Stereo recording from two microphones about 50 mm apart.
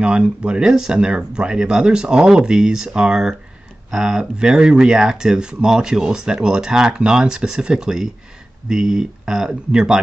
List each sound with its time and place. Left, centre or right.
0.0 s speech: right